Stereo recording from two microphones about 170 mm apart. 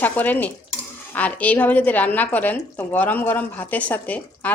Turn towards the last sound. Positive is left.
turn(degrees=10)  # may be behind; listen again after turning